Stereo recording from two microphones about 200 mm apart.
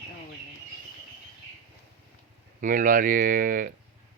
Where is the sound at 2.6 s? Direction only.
40° right (ahead or behind).